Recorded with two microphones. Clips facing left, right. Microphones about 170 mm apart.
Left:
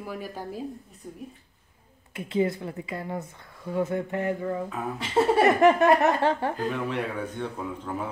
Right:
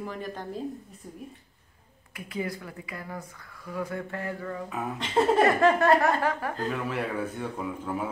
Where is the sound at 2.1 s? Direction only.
25° left (ahead or behind).